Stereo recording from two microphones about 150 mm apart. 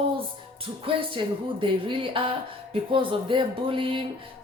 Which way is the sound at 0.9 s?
35° right (ahead or behind).